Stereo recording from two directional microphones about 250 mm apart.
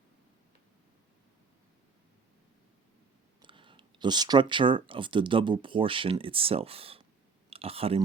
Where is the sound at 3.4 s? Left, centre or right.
Centre.